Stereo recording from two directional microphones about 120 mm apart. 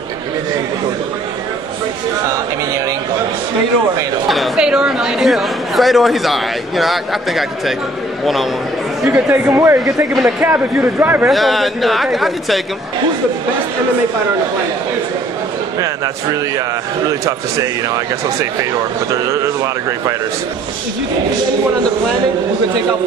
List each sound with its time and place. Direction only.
4.3 s a woman's voice: 5° right (ahead or behind)
9.0 s speech: 15° right (ahead or behind)
11.2 s a woman's voice: centre (ahead or behind)
15.8 s speech: 30° right (ahead or behind)